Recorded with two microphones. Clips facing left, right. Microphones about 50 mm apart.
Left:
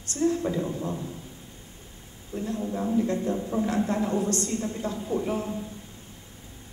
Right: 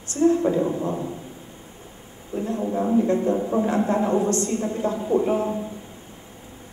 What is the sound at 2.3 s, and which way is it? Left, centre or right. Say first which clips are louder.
A man's voice: right 5 dB; right.